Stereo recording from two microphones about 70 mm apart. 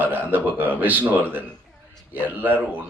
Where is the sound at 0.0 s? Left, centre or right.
Right.